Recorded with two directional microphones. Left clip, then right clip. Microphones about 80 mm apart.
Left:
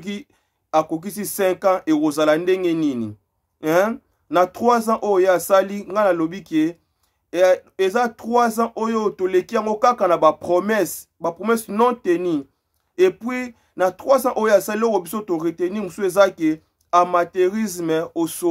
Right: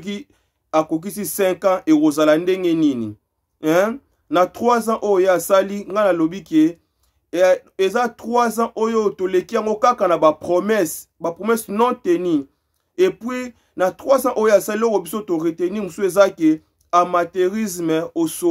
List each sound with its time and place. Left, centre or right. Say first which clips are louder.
0.0 s speech: right 2 dB; right